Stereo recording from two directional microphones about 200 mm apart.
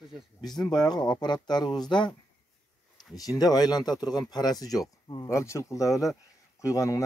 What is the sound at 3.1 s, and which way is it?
Speech, 20° left (ahead or behind).